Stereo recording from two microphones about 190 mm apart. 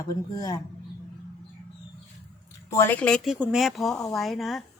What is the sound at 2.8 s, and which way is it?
A woman's voice, 10° left (ahead or behind).